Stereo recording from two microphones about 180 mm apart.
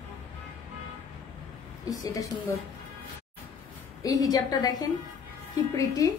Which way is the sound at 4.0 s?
20° left (ahead or behind).